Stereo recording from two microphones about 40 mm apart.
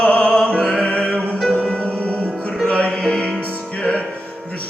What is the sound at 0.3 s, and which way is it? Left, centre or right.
Music, left.